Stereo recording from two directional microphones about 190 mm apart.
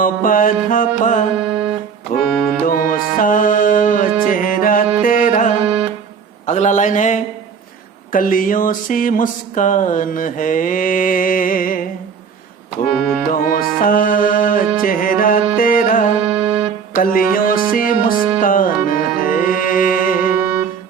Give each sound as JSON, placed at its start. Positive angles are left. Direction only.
{"t": 0.0, "sound": "a sound", "side_deg": 45}
{"t": 1.5, "sound": "music", "side_deg": -5}
{"t": 2.6, "sound": "music", "side_deg": 50}
{"t": 6.4, "sound": "a man's voice", "side_deg": 40}
{"t": 8.1, "sound": "a sound", "side_deg": 45}
{"t": 12.9, "sound": "music", "side_deg": 0}
{"t": 13.3, "sound": "a sound", "side_deg": 50}
{"t": 15.5, "sound": "carnatic music", "side_deg": 50}
{"t": 16.2, "sound": "music", "side_deg": -5}
{"t": 17.0, "sound": "a sound", "side_deg": 50}
{"t": 18.3, "sound": "music", "side_deg": 45}
{"t": 20.2, "sound": "music", "side_deg": -10}